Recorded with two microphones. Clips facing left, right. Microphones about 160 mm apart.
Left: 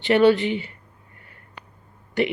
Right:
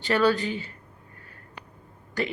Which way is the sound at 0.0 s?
25° left (ahead or behind).